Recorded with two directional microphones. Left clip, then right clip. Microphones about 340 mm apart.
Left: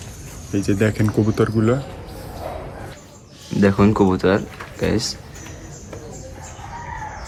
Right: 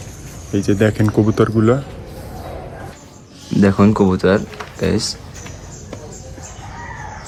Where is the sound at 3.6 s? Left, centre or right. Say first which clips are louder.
Right 2 dB; centre.